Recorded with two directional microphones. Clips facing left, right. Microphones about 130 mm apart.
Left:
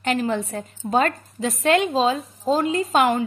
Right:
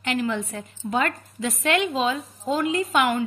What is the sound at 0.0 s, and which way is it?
A woman's voice, 35° left (ahead or behind).